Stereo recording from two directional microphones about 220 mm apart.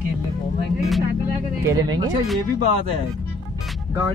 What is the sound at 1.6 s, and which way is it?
Speech, 15° right (ahead or behind).